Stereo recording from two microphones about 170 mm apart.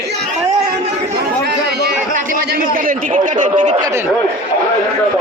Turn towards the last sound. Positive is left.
turn(degrees=-45)  # may be behind; listen again after turning